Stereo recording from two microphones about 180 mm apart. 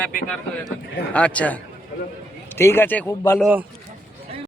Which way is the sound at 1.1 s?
5° left (ahead or behind).